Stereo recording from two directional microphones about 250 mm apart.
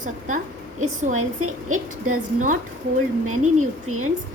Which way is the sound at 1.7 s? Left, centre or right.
Right.